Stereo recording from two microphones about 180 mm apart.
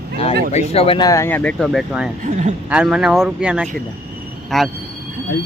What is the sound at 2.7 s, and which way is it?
Speech, 5° right (ahead or behind).